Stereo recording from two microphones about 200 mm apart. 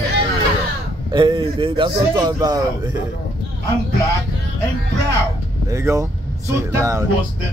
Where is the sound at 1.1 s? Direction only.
25° right (ahead or behind).